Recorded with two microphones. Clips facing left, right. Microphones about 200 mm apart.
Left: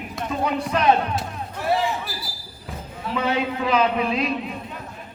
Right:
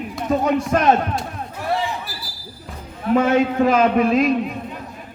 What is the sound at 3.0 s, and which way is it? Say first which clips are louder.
A man's voice: right 8 dB; 50° right (ahead or behind).